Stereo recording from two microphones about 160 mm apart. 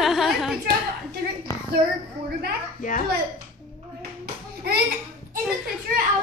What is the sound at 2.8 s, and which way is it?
Speech, 55° left (ahead or behind).